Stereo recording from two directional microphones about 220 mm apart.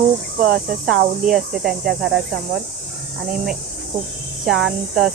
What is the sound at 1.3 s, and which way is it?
Speech, centre (ahead or behind).